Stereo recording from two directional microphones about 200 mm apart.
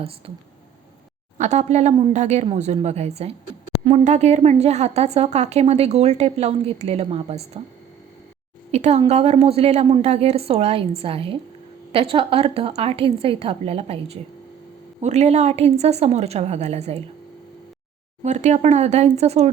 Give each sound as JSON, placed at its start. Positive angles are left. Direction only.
{"t": 1.4, "sound": "speech", "side_deg": -35}
{"t": 8.7, "sound": "a woman's voice", "side_deg": -35}
{"t": 18.2, "sound": "speech", "side_deg": -35}